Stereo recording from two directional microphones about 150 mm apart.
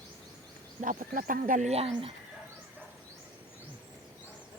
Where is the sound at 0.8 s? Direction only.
65° right (ahead or behind); by 2.2 s 40° right (ahead or behind).